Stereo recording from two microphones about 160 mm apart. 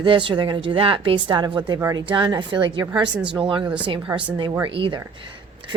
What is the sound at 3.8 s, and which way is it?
Speech, 30° right (ahead or behind).